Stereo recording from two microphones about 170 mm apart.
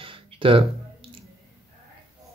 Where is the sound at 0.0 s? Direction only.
30° right (ahead or behind).